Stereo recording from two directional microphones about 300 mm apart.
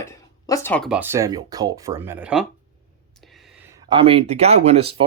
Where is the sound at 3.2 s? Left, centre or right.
Centre.